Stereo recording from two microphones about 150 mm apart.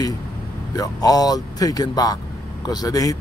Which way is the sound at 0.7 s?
25° left (ahead or behind).